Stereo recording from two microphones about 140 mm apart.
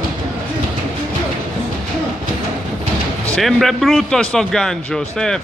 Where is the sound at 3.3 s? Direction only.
Centre (ahead or behind).